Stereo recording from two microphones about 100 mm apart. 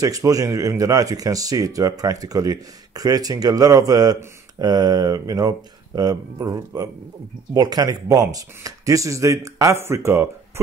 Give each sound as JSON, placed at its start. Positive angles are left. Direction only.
{"t": 0.0, "sound": "speech", "side_deg": -35}